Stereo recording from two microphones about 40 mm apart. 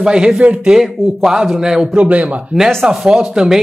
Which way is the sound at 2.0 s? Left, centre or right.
Right.